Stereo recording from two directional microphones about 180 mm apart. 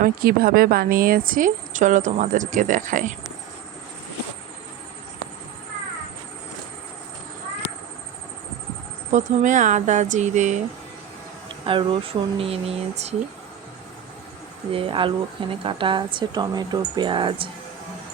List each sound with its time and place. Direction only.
0.0 s speech: 55° right (ahead or behind)
9.1 s speech: 45° right (ahead or behind)
11.6 s speech: 30° right (ahead or behind)
14.7 s speech: 30° right (ahead or behind)